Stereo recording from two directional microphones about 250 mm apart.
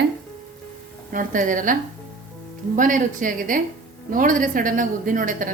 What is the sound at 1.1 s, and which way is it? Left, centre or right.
Speech, right.